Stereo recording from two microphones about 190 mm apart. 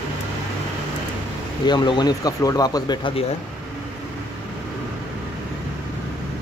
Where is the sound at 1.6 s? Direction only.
25° left (ahead or behind).